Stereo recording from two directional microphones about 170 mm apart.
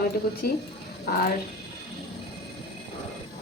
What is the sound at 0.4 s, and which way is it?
Speech, 65° left (ahead or behind).